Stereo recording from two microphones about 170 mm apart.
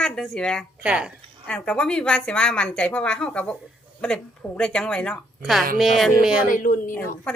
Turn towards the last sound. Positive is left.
turn(degrees=50)  # may be behind; listen again after turning